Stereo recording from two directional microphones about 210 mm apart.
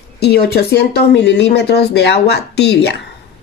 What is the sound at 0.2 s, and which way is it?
Speech, 50° left (ahead or behind).